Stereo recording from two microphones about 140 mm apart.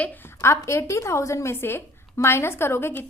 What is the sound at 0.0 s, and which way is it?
A woman's voice, 15° left (ahead or behind).